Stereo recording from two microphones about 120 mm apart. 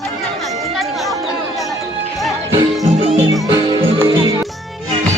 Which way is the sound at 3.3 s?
30° right (ahead or behind).